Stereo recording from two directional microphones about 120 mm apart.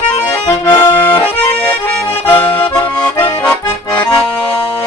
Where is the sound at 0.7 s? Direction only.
15° left (ahead or behind).